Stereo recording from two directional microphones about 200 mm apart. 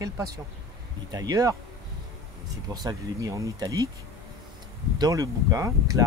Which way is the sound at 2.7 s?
20° right (ahead or behind).